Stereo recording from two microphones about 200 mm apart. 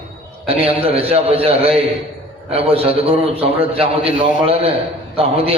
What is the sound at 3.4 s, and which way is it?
A man's voice, 30° right (ahead or behind).